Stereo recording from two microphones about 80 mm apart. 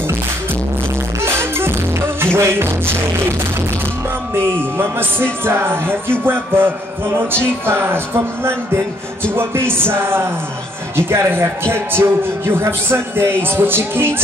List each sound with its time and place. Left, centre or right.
1.2 s music: right
4.6 s a man's voice: right